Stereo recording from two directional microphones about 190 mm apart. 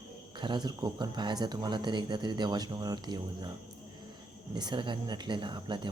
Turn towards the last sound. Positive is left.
turn(degrees=-25)  # may be behind; listen again after turning